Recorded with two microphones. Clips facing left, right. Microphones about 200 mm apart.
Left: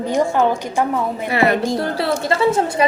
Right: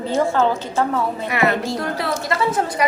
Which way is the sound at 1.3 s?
30° left (ahead or behind).